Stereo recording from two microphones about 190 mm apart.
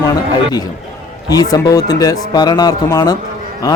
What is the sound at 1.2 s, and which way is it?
Speech, 20° left (ahead or behind).